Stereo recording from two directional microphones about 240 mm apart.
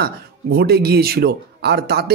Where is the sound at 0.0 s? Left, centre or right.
Right.